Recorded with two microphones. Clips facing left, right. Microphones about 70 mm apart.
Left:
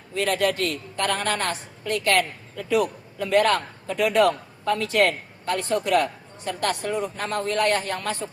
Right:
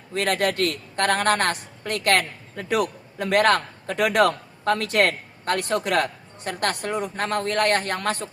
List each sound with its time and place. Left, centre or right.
0.1 s a woman's voice: right